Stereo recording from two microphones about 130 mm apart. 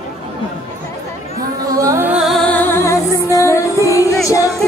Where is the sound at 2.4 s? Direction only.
15° left (ahead or behind).